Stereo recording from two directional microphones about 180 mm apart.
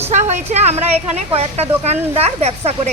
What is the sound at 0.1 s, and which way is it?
A woman's voice, 40° right (ahead or behind).